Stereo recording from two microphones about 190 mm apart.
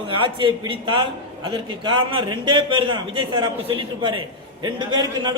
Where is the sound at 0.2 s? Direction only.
25° right (ahead or behind).